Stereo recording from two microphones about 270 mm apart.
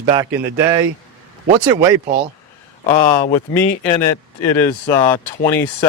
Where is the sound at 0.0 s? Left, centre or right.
Centre.